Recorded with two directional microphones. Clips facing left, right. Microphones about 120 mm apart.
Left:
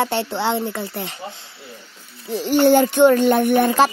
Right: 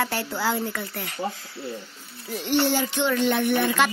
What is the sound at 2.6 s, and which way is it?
Speech, 50° left (ahead or behind).